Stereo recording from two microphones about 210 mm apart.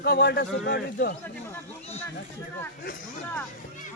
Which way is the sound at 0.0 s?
50° left (ahead or behind).